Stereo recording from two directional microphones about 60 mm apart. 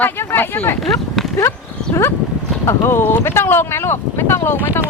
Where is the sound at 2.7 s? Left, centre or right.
Left.